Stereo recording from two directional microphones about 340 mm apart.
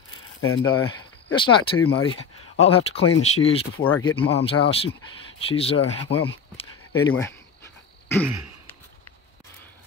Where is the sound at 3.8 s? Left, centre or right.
Centre.